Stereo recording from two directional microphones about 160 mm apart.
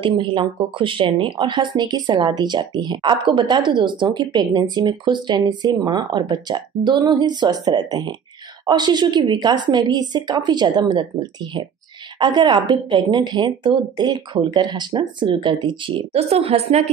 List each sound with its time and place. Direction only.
0.0 s speech: 30° right (ahead or behind)